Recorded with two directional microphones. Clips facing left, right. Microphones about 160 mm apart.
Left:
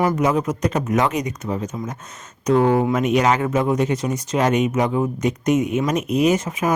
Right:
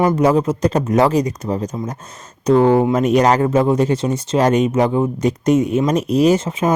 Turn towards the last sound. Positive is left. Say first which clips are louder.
# right 4 dB
turn(degrees=-30)  # may be behind; listen again after turning